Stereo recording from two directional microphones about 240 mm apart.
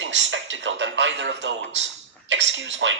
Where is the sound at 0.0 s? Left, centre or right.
Right.